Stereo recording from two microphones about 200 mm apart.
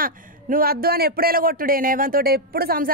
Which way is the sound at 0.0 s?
45° right (ahead or behind).